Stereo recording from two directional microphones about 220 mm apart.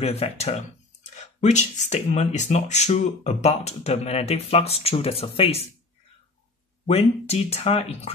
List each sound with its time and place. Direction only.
0.0 s speech: 30° left (ahead or behind)
6.9 s speech: 30° left (ahead or behind)